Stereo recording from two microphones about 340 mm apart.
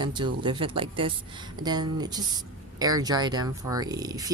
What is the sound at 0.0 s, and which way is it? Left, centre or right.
Speech, centre.